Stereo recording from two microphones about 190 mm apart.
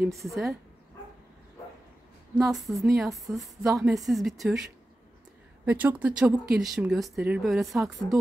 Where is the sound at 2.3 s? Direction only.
Centre (ahead or behind).